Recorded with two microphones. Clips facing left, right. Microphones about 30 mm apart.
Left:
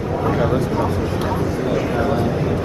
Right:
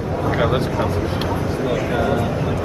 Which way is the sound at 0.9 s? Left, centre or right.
Right.